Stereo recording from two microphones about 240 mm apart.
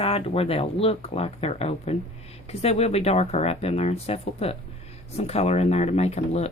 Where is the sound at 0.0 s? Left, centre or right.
Left.